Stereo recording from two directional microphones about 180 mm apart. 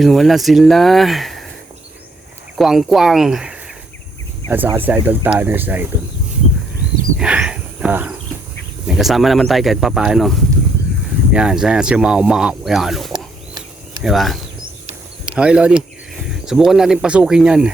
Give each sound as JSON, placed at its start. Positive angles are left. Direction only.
{"t": 0.0, "sound": "speech", "side_deg": 0}
{"t": 2.6, "sound": "speech", "side_deg": 0}
{"t": 7.2, "sound": "a sound", "side_deg": -5}
{"t": 8.9, "sound": "speech", "side_deg": 0}
{"t": 11.3, "sound": "speech", "side_deg": -5}
{"t": 13.1, "sound": "a sound", "side_deg": -25}
{"t": 14.0, "sound": "speech", "side_deg": 0}